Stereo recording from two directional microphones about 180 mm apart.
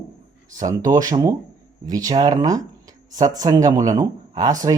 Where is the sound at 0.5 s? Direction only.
20° right (ahead or behind).